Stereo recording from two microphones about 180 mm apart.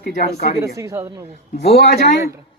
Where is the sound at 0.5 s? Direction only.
15° right (ahead or behind).